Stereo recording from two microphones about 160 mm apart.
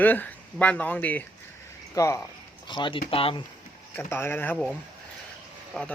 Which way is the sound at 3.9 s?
15° left (ahead or behind).